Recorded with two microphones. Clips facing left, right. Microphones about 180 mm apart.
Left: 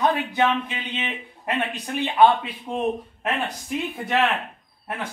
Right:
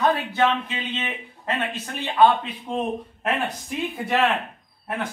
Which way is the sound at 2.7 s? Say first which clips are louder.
Right 1 dB; 5° left (ahead or behind).